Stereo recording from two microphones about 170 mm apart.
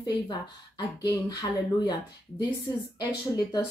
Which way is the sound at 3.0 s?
25° left (ahead or behind).